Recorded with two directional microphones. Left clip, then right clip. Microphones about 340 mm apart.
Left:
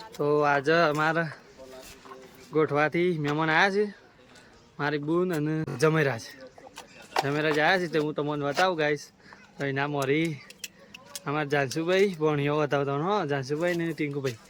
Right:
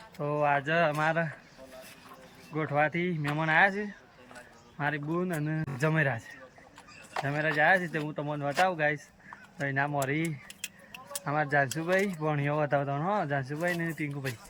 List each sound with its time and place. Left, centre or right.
0.2 s speech: centre
2.5 s speech: centre
6.7 s a sound: left
7.3 s speech: centre